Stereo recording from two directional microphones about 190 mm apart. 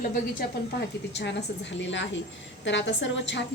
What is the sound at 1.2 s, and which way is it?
A woman's voice, 65° left (ahead or behind).